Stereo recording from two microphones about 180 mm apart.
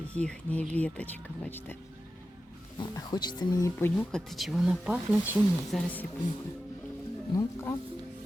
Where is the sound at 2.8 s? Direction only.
25° left (ahead or behind).